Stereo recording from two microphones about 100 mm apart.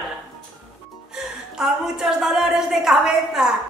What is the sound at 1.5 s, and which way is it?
A woman's voice, 5° right (ahead or behind).